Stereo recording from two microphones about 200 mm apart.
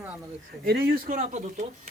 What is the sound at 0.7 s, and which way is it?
Speech, 50° right (ahead or behind).